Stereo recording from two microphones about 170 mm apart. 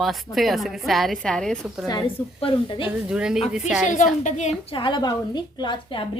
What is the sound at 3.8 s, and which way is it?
Speech, 45° left (ahead or behind).